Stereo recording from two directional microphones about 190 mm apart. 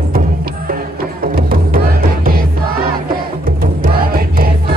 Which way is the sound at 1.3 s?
50° right (ahead or behind).